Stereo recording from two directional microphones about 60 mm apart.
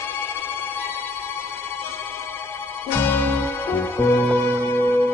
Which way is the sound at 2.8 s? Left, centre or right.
Left.